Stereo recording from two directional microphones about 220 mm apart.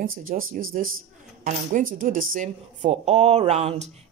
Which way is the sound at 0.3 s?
40° right (ahead or behind).